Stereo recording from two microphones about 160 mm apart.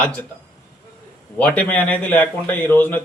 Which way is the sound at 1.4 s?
10° left (ahead or behind).